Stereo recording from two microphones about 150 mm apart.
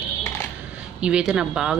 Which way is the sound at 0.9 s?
5° right (ahead or behind).